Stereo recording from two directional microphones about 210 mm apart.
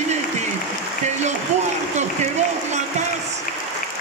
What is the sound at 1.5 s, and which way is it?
Speech, 35° right (ahead or behind).